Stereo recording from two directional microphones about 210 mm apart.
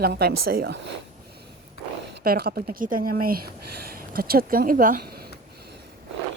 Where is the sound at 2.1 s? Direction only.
45° right (ahead or behind).